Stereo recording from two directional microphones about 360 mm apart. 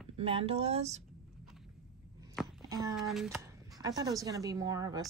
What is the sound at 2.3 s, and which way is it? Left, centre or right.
Speech, centre.